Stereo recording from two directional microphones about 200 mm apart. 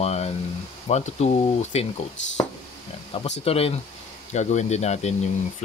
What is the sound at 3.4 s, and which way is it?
Speech, 30° left (ahead or behind).